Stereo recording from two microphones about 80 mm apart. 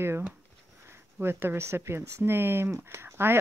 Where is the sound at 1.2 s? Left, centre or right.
Right.